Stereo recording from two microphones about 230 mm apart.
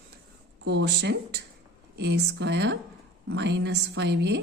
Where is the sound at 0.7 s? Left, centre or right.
Right.